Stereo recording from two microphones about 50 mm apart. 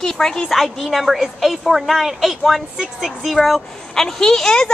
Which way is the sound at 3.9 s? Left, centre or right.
Centre.